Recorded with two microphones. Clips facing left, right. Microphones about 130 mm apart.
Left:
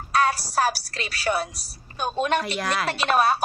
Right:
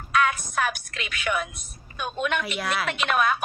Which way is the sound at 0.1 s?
35° left (ahead or behind).